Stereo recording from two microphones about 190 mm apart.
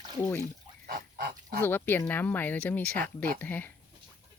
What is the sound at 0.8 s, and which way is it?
Goose, 55° right (ahead or behind).